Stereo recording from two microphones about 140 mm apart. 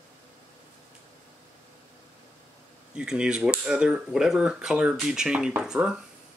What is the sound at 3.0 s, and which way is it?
Speech, 5° right (ahead or behind).